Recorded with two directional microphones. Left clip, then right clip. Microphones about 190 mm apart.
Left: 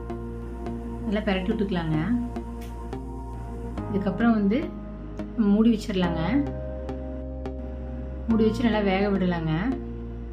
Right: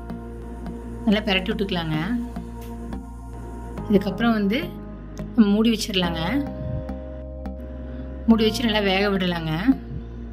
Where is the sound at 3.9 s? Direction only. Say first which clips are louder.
Right 4 dB; 45° right (ahead or behind).